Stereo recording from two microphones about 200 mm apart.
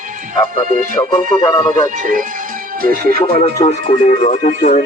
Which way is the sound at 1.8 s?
40° right (ahead or behind).